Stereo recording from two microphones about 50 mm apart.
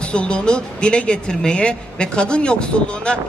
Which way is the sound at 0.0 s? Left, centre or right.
Left.